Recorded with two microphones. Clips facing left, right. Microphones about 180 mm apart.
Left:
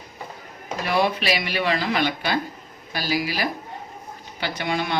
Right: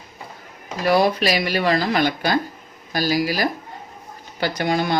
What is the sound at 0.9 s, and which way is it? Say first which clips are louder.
Speech: right 5 dB; 40° right (ahead or behind).